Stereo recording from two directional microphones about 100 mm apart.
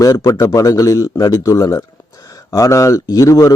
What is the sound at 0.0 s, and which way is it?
Speech, 35° left (ahead or behind).